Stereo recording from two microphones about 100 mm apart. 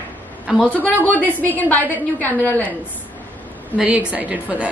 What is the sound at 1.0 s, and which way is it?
A woman's voice, 15° left (ahead or behind).